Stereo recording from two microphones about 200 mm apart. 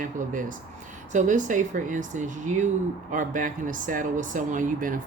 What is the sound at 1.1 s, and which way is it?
Speech, 40° right (ahead or behind).